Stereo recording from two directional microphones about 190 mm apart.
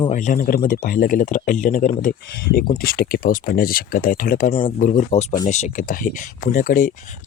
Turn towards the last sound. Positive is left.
turn(degrees=45)  # may be behind; listen again after turning